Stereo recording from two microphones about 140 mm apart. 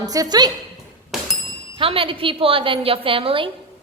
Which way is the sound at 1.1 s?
Centre (ahead or behind).